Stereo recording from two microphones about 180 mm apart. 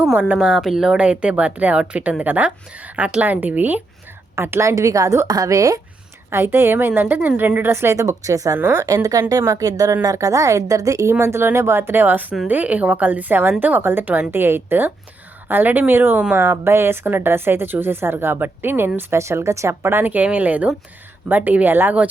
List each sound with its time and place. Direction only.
0.0 s a woman's voice: 10° right (ahead or behind)